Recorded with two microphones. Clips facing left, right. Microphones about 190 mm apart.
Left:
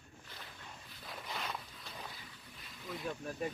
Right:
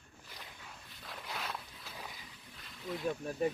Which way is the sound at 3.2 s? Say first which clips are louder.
Right 4 dB; 25° right (ahead or behind).